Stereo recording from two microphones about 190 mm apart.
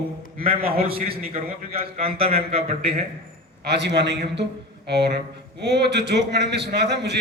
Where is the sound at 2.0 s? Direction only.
30° right (ahead or behind).